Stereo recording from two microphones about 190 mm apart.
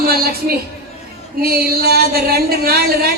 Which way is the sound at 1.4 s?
55° right (ahead or behind).